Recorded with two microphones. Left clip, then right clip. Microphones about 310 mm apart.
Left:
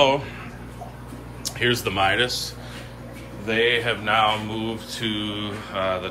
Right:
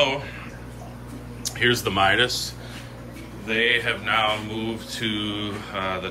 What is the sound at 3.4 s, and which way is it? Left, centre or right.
Mantra, centre.